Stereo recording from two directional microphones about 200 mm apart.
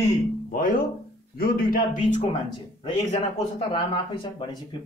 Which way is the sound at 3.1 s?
30° left (ahead or behind).